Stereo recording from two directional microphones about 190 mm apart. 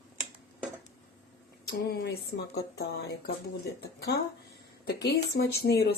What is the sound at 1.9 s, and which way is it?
Speech, 60° left (ahead or behind).